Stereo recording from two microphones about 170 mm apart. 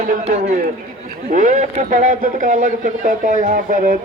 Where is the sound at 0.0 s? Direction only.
50° right (ahead or behind).